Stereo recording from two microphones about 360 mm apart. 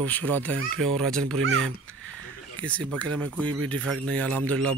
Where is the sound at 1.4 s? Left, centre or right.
Right.